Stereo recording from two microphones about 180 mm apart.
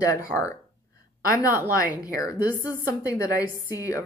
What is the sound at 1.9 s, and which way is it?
A woman's voice, 20° left (ahead or behind).